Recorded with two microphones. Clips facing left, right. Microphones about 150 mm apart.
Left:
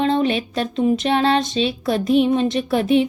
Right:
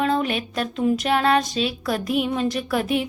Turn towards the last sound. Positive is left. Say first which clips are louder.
# left 6 dB
turn(degrees=25)  # may be behind; listen again after turning